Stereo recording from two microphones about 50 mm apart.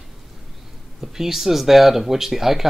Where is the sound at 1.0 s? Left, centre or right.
Centre.